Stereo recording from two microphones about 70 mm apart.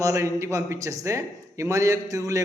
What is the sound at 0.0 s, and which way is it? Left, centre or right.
A man's voice, right.